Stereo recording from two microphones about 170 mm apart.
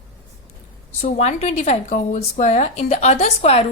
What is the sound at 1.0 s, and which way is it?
A woman's voice, 40° left (ahead or behind).